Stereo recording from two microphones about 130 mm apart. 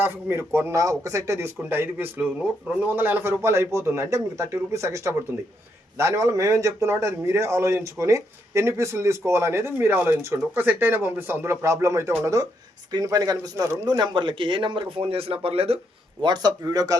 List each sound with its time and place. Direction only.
0.0 s a man's voice: 20° right (ahead or behind); by 15.8 s 50° right (ahead or behind)
16.2 s speech: 35° right (ahead or behind)